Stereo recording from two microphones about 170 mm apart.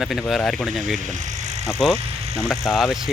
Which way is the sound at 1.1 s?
45° right (ahead or behind).